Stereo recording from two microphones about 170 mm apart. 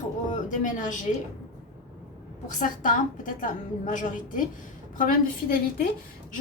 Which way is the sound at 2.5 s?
50° left (ahead or behind).